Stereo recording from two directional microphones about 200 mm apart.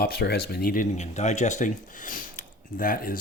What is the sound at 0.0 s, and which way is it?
Speech, 50° left (ahead or behind).